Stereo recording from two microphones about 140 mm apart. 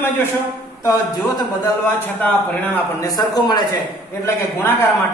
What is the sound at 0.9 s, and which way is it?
Speech, 25° left (ahead or behind).